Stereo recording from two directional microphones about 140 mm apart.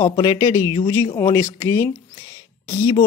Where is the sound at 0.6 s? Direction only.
35° left (ahead or behind).